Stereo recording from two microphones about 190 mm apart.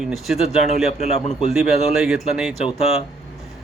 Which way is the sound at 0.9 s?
35° left (ahead or behind).